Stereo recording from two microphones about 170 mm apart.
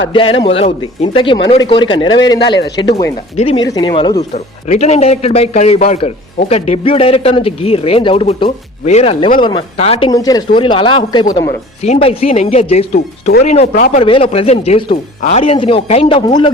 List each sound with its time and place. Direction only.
0.1 s speech: 30° left (ahead or behind)
4.7 s speech: 40° left (ahead or behind)
10.1 s speech: 20° left (ahead or behind); by 13.7 s 40° left (ahead or behind)
13.7 s speech: 55° left (ahead or behind)
14.0 s speech: 30° left (ahead or behind)